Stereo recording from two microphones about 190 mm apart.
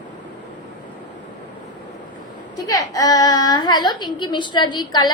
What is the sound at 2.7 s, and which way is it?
A woman's voice, 15° left (ahead or behind).